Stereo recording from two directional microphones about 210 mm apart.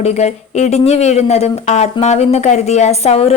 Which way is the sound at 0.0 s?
30° left (ahead or behind).